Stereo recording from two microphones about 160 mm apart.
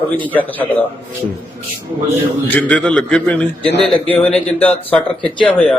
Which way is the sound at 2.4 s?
10° left (ahead or behind).